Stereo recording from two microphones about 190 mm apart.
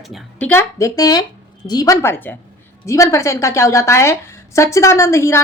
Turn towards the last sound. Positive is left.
turn(degrees=15)  # may be behind; listen again after turning